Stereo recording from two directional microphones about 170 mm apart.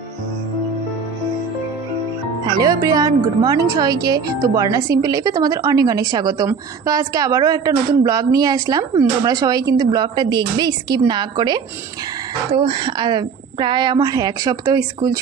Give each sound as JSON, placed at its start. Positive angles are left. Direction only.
{"t": 2.4, "sound": "a woman's voice", "side_deg": -25}